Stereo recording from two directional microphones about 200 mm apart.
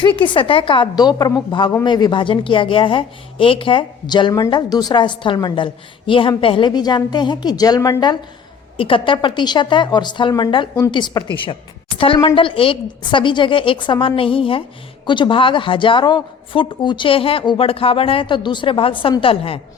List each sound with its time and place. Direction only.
0.0 s a woman's voice: 25° left (ahead or behind)